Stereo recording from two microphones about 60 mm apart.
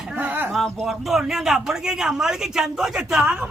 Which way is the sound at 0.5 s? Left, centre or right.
Centre.